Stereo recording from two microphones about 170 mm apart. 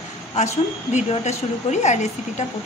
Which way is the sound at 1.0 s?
45° left (ahead or behind).